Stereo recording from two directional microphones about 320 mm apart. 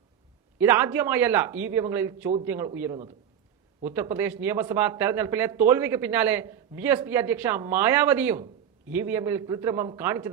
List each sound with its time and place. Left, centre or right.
0.6 s speech: centre